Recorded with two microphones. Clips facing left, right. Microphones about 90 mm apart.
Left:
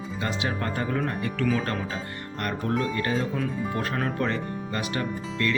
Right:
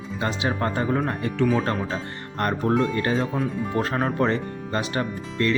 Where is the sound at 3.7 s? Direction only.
30° right (ahead or behind).